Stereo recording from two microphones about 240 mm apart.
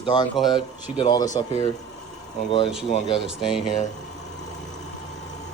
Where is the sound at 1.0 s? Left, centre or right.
Centre.